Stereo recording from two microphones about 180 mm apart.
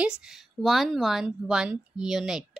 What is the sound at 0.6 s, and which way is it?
Speech, centre (ahead or behind).